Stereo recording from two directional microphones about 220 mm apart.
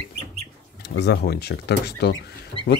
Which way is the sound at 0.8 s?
50° left (ahead or behind).